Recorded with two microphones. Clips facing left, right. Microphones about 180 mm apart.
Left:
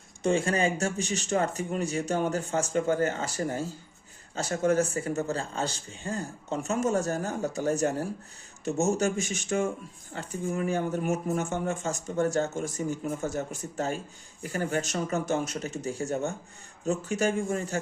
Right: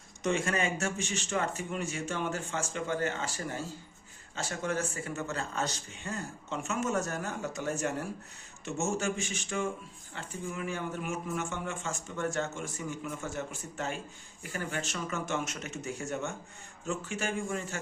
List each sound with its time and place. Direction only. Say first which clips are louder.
0.2 s speech: left 5 dB; 30° left (ahead or behind)